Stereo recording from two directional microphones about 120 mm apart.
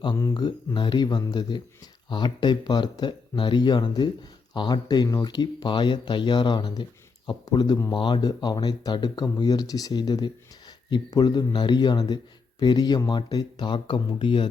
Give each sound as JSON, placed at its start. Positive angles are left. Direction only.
{"t": 0.0, "sound": "speech", "side_deg": 35}